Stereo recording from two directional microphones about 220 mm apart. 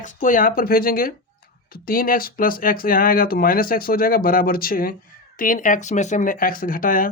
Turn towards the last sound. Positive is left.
turn(degrees=40)  # may be behind; listen again after turning